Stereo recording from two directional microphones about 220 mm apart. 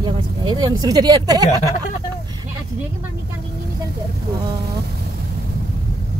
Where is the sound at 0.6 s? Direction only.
20° right (ahead or behind).